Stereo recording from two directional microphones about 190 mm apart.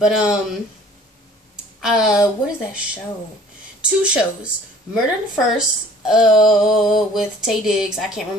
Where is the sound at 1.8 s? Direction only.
5° right (ahead or behind).